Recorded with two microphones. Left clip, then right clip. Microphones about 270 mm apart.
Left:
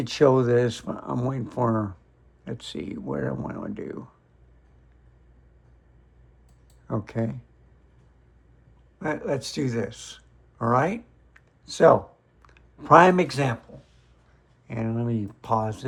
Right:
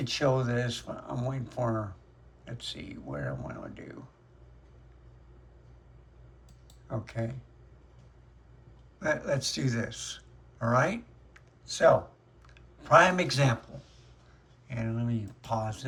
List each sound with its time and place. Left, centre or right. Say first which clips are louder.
0.0 s speech: left 9 dB; centre
7.0 s speech: left 5 dB; centre
9.0 s speech: left 2 dB; centre
14.7 s speech: left 6 dB; centre